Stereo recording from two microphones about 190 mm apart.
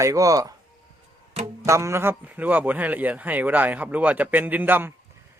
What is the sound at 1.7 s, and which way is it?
Speech, 15° right (ahead or behind).